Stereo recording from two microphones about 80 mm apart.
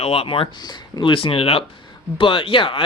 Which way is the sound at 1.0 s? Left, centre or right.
Left.